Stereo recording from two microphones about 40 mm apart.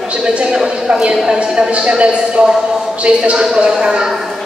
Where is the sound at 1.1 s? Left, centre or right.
Centre.